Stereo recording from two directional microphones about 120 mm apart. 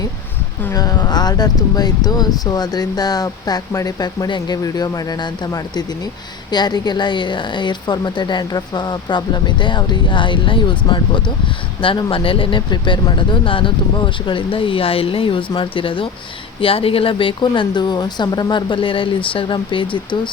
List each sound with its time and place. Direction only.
0.7 s speech: 30° left (ahead or behind)